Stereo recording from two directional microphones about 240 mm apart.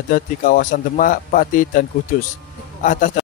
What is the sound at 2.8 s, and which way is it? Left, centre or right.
Speech, left.